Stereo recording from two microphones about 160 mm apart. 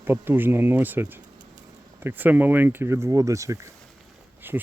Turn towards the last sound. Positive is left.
turn(degrees=-15)  # may be behind; listen again after turning